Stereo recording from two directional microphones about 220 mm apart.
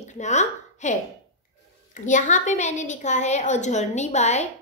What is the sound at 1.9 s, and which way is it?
A woman's voice, 35° left (ahead or behind).